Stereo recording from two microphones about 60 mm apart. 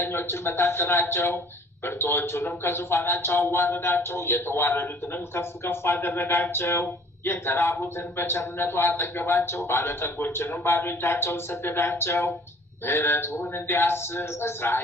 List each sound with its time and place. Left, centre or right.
0.0 s speech: left